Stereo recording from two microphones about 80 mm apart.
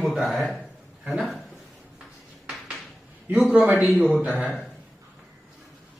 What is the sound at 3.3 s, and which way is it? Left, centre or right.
Speech, centre.